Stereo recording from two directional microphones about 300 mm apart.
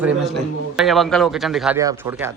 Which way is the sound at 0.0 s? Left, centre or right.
Centre.